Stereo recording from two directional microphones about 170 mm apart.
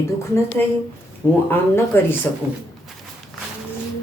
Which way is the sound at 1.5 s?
15° left (ahead or behind).